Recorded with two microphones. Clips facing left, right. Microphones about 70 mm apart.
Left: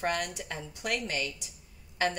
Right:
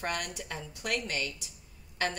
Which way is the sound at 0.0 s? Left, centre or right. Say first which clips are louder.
Left 3 dB; centre.